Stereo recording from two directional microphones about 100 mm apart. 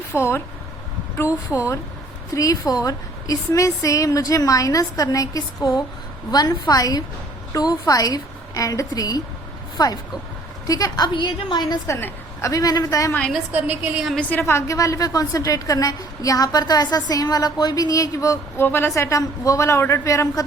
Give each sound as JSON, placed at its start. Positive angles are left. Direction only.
{"t": 0.1, "sound": "a woman's voice", "side_deg": 25}
{"t": 11.9, "sound": "a woman's voice", "side_deg": 25}
{"t": 12.5, "sound": "a woman's voice", "side_deg": 35}
{"t": 13.5, "sound": "a woman's voice", "side_deg": -15}
{"t": 14.2, "sound": "a woman's voice", "side_deg": 15}
{"t": 18.6, "sound": "speech", "side_deg": 20}